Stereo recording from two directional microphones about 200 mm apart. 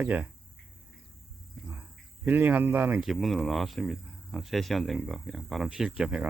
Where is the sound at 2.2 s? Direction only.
10° right (ahead or behind).